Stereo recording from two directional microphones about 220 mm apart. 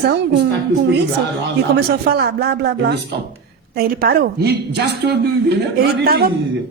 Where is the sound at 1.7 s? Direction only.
45° right (ahead or behind).